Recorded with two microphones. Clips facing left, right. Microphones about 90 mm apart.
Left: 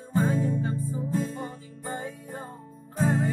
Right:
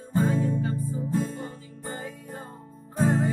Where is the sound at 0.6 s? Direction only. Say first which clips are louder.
Right 1 dB; 30° left (ahead or behind).